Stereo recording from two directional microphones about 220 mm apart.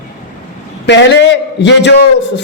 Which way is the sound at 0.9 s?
55° left (ahead or behind).